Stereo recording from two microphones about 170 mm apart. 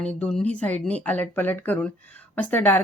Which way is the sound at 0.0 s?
5° left (ahead or behind).